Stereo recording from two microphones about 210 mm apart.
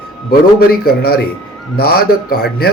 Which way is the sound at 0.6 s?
45° left (ahead or behind).